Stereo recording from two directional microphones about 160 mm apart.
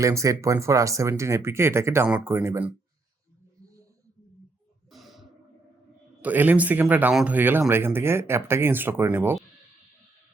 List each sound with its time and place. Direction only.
0.0 s speech: 20° right (ahead or behind)
4.9 s a sound: centre (ahead or behind)
6.2 s speech: 10° right (ahead or behind)